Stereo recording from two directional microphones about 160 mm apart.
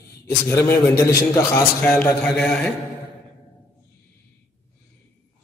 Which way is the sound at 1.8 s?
5° left (ahead or behind).